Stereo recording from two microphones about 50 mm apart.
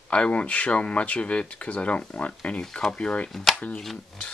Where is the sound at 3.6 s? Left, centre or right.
Left.